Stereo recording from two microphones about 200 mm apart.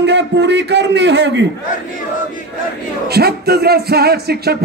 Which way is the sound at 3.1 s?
50° right (ahead or behind).